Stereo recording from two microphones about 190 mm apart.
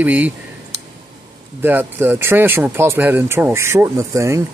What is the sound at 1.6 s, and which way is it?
Speech, 10° right (ahead or behind).